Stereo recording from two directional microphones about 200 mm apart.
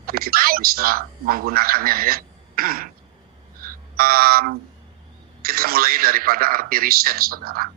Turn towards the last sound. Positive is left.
turn(degrees=-45)  # may be behind; listen again after turning